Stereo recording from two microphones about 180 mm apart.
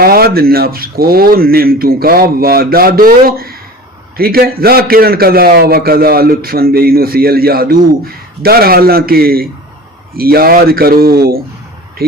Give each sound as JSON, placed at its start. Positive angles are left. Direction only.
{"t": 0.0, "sound": "a man's voice", "side_deg": -60}